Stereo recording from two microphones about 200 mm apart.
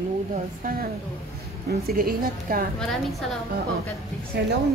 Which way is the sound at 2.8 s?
Centre (ahead or behind).